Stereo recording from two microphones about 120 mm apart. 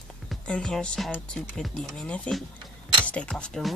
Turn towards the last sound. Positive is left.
turn(degrees=5)  # may be behind; listen again after turning